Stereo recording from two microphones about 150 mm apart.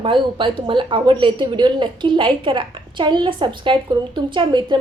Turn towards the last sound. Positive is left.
turn(degrees=-30)  # may be behind; listen again after turning